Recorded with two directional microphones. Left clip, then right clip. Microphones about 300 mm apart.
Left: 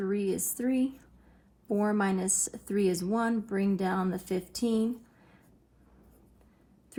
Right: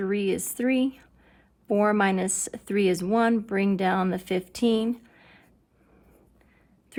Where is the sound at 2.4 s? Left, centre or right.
Right.